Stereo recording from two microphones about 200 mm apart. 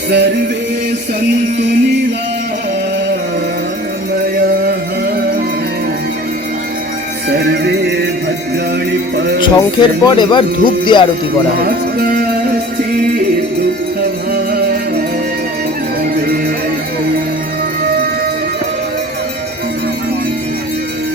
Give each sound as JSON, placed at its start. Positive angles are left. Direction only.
{"t": 1.5, "sound": "music", "side_deg": -60}
{"t": 7.3, "sound": "music", "side_deg": -55}
{"t": 9.1, "sound": "music", "side_deg": -60}
{"t": 9.4, "sound": "speech", "side_deg": 25}
{"t": 11.6, "sound": "music", "side_deg": -50}